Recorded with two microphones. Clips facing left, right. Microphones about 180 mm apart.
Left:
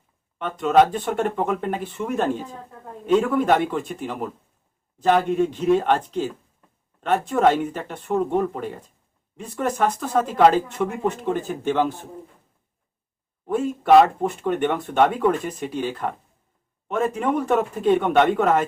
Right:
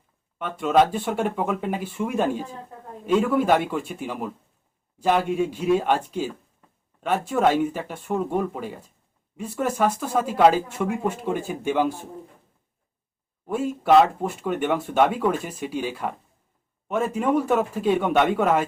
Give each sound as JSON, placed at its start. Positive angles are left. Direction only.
{"t": 0.3, "sound": "speech", "side_deg": -5}
{"t": 13.5, "sound": "speech", "side_deg": -5}